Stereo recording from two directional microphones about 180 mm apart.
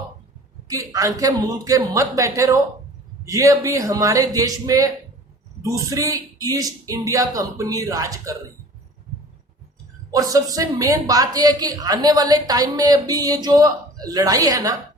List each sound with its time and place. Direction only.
0.7 s a woman's voice: 20° right (ahead or behind)
10.1 s a woman's voice: 20° right (ahead or behind)